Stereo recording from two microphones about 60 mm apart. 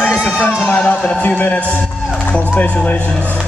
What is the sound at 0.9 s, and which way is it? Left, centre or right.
A man's voice, centre.